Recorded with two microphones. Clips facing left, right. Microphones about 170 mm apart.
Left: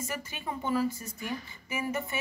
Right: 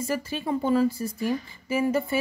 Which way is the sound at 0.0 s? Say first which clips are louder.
Right 8 dB; 35° right (ahead or behind).